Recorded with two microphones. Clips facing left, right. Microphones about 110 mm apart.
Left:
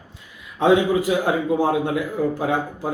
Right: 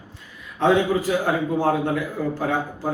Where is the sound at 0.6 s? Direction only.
15° left (ahead or behind).